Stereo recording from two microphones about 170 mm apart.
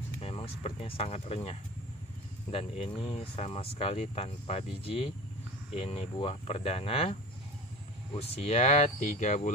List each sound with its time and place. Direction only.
0.2 s speech: 35° left (ahead or behind)